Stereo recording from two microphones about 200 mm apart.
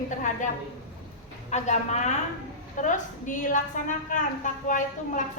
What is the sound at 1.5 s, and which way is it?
A woman's voice, 35° left (ahead or behind).